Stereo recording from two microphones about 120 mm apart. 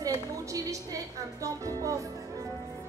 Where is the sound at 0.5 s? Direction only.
25° right (ahead or behind).